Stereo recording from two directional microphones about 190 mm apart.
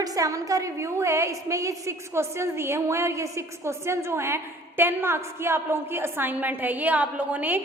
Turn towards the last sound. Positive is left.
turn(degrees=-10)  # may be behind; listen again after turning